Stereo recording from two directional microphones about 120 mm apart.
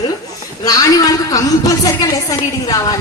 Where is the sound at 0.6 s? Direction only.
30° left (ahead or behind).